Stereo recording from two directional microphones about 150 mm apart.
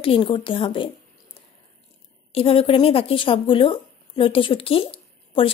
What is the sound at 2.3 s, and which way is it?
Speech, 40° left (ahead or behind).